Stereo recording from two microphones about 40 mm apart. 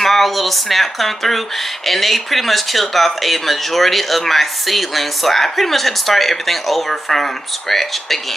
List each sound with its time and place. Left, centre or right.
0.0 s speech: centre